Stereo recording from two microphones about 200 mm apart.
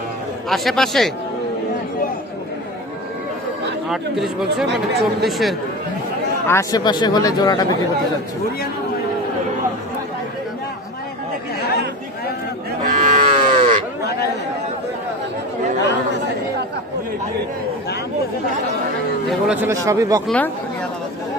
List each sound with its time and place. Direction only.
0.4 s speech: centre (ahead or behind)
3.8 s speech: centre (ahead or behind)
6.5 s speech: 15° left (ahead or behind)
12.8 s livestock: 35° right (ahead or behind)
14.0 s chatter: 55° left (ahead or behind)
19.3 s speech: 5° right (ahead or behind)
19.7 s speech: 15° right (ahead or behind)
20.2 s speech: 5° left (ahead or behind)